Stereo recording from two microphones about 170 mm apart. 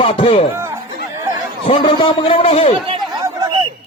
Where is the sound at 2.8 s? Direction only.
30° right (ahead or behind).